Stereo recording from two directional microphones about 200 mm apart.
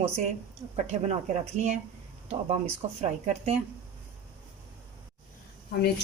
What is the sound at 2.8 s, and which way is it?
Speech, 30° right (ahead or behind).